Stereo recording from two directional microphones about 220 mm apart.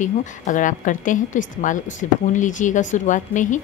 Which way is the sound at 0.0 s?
35° left (ahead or behind).